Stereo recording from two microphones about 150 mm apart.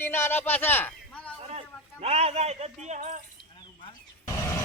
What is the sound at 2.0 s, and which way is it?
Speech, 45° right (ahead or behind).